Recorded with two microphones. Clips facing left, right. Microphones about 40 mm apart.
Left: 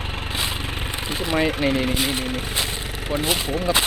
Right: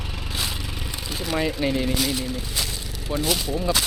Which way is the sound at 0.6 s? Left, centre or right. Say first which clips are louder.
Left 5 dB; left.